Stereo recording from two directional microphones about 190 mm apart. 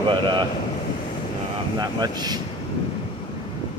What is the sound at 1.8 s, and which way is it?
Speech, 20° right (ahead or behind).